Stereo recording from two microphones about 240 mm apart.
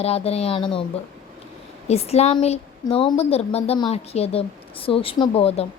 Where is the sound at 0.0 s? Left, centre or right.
Left.